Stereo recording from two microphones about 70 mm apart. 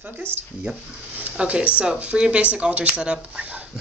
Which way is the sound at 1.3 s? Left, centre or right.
Centre.